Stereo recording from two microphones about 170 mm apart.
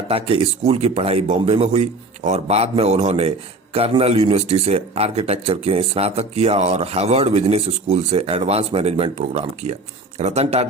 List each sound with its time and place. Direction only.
0.1 s a man's voice: 35° right (ahead or behind)